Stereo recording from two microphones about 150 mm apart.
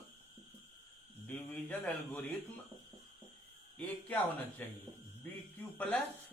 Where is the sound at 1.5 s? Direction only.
10° left (ahead or behind).